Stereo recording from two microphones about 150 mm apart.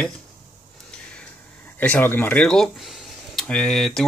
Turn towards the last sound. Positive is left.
turn(degrees=5)  # may be behind; listen again after turning